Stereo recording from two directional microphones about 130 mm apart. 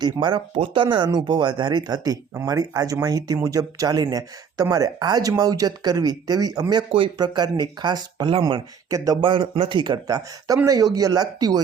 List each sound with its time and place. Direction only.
0.0 s speech: 35° right (ahead or behind)